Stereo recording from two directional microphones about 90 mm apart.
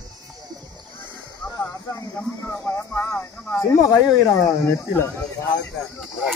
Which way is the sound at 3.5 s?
40° left (ahead or behind).